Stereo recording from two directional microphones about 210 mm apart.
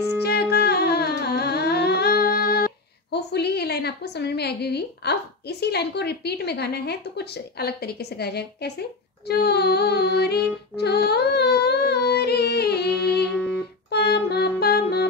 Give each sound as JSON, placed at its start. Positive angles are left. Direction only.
{"t": 0.2, "sound": "music", "side_deg": 50}
{"t": 13.3, "sound": "music", "side_deg": 5}
{"t": 13.8, "sound": "music", "side_deg": 50}